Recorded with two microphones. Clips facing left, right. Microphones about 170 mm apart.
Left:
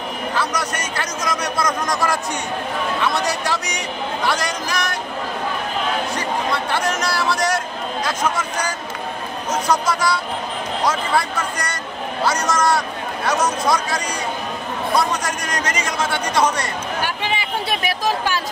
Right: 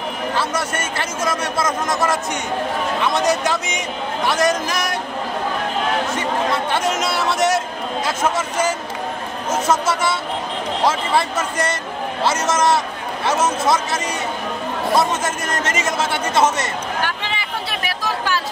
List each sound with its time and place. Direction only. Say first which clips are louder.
0.4 s a man's voice: even; 25° right (ahead or behind)
3.2 s a man's voice: right 4 dB; 20° right (ahead or behind)
6.7 s a man's voice: right 1 dB; 25° right (ahead or behind)
17.0 s a sound: left 1 dB; 15° left (ahead or behind)